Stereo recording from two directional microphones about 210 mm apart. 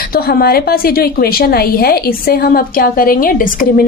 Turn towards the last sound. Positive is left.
turn(degrees=40)  # may be behind; listen again after turning